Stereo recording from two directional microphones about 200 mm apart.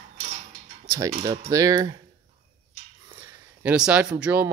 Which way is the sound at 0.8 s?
15° right (ahead or behind).